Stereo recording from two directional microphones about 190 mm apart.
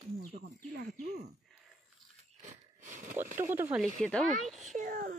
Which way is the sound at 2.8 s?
40° right (ahead or behind).